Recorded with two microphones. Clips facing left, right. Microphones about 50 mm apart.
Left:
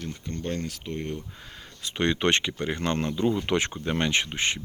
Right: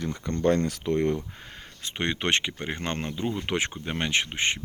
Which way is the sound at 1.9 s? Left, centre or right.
Centre.